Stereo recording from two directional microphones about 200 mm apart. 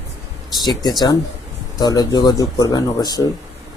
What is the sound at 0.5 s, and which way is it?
Speech, 20° left (ahead or behind).